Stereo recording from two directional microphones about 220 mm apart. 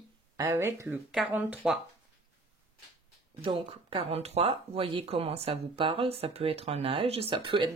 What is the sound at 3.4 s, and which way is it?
Speech, 25° right (ahead or behind).